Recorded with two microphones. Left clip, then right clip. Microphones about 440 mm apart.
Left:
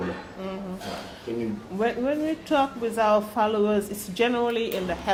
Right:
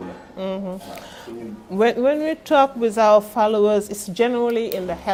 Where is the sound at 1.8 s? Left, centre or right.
Right.